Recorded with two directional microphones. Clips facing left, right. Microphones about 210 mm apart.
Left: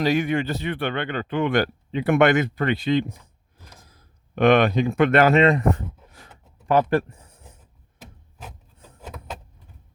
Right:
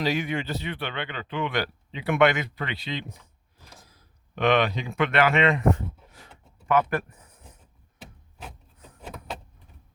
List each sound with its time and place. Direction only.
0.0 s speech: 50° left (ahead or behind); by 7.3 s 30° left (ahead or behind)